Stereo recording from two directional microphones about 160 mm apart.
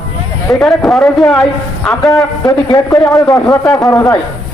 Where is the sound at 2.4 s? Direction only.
20° left (ahead or behind).